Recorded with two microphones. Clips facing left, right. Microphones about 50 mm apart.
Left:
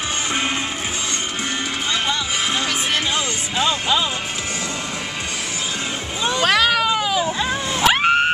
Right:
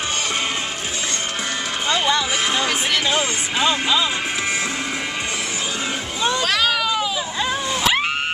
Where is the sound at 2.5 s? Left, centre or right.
Centre.